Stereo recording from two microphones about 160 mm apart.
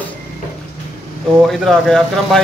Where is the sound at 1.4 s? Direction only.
Centre (ahead or behind).